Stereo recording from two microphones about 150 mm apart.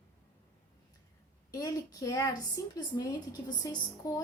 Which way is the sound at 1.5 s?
25° left (ahead or behind).